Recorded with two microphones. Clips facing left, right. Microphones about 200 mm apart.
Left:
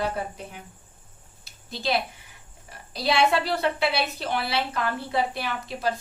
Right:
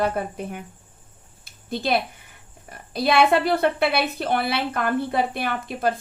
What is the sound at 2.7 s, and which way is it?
A woman's voice, 55° right (ahead or behind).